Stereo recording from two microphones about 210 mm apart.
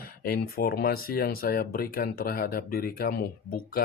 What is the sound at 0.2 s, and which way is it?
Speech, 45° left (ahead or behind).